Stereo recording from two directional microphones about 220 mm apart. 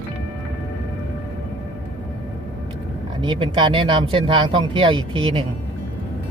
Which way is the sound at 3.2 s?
20° right (ahead or behind).